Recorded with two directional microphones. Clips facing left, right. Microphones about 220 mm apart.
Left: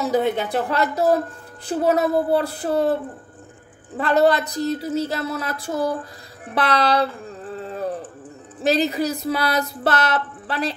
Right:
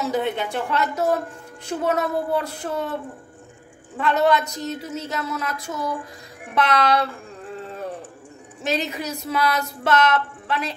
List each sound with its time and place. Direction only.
0.1 s speech: 40° left (ahead or behind)
8.6 s speech: 35° left (ahead or behind)